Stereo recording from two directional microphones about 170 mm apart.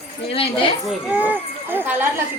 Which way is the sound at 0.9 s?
10° right (ahead or behind).